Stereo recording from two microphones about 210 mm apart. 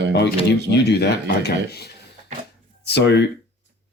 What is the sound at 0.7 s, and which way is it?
Speech, 50° left (ahead or behind).